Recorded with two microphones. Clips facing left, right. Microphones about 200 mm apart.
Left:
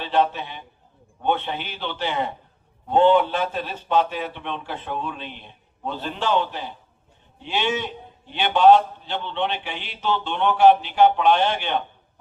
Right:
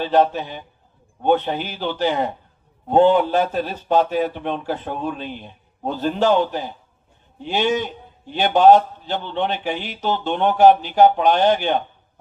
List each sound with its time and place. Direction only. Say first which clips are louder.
0.0 s a man's voice: right 4 dB; 40° right (ahead or behind)